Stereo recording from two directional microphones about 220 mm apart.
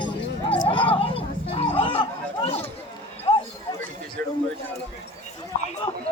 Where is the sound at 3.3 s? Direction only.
25° left (ahead or behind).